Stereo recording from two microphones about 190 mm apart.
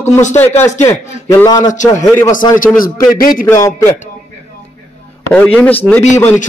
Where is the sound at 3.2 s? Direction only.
50° left (ahead or behind).